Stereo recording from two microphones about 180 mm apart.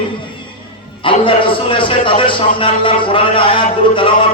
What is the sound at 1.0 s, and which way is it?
A man's voice, 30° left (ahead or behind).